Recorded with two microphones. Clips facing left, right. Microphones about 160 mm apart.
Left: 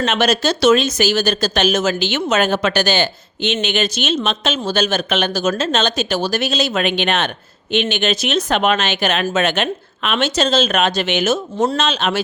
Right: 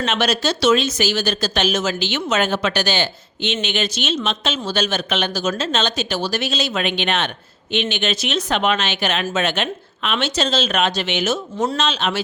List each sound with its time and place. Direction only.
0.0 s speech: 50° left (ahead or behind)